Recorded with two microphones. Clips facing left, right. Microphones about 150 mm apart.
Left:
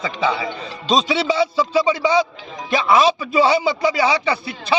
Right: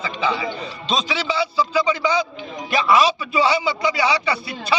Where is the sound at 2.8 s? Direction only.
30° left (ahead or behind).